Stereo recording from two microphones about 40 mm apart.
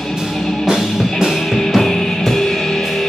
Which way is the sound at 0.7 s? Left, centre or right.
Centre.